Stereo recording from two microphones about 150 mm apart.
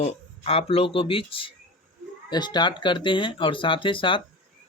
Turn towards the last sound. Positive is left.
turn(degrees=35)  # may be behind; listen again after turning